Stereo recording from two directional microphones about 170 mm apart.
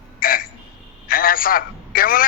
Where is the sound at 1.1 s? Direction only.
55° left (ahead or behind).